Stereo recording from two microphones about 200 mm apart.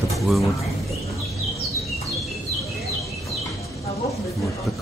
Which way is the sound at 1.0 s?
15° left (ahead or behind).